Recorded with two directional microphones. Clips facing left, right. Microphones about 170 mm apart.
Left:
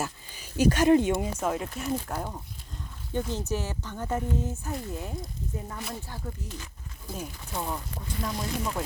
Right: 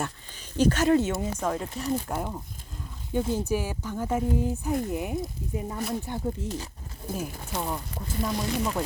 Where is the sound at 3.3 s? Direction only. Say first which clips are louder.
Right 4 dB; 10° right (ahead or behind).